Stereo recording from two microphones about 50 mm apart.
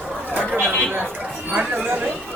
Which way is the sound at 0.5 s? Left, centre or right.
Right.